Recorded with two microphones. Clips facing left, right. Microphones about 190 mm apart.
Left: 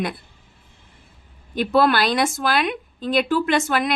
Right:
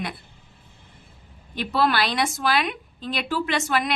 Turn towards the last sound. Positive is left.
turn(degrees=50)  # may be behind; listen again after turning